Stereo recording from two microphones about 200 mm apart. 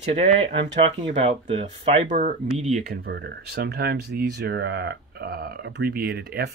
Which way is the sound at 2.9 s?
50° right (ahead or behind).